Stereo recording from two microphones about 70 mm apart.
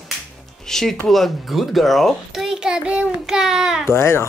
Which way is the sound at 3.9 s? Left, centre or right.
Left.